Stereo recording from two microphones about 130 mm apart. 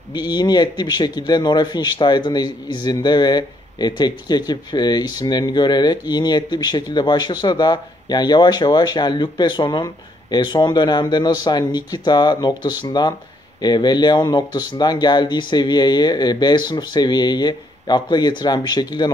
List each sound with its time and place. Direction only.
0.1 s a man's voice: 35° left (ahead or behind)